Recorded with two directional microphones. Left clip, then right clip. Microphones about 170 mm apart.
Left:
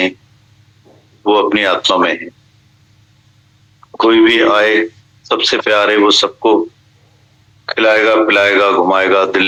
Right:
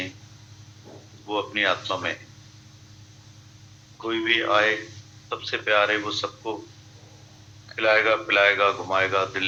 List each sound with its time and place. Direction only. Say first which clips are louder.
1.3 s speech: left 13 dB; 90° left
3.9 s speech: left 15 dB; 90° left
7.7 s speech: left 10 dB; 90° left